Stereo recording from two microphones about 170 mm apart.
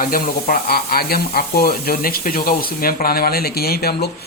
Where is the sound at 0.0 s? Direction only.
60° left (ahead or behind).